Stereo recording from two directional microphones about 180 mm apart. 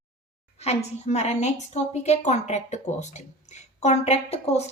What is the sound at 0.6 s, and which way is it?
Speech, 35° left (ahead or behind).